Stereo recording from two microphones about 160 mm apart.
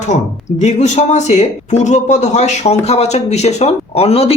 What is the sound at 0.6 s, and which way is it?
Speech, 45° left (ahead or behind).